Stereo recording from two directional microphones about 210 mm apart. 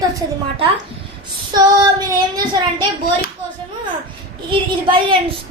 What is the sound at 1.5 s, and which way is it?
Speech, 20° right (ahead or behind).